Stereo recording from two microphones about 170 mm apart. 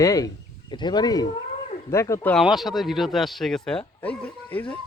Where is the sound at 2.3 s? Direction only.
Centre (ahead or behind).